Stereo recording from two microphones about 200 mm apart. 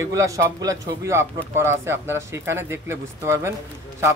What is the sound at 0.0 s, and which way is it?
A man's voice, 15° right (ahead or behind).